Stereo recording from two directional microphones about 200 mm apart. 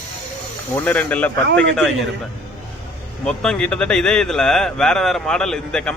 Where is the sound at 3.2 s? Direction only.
5° left (ahead or behind).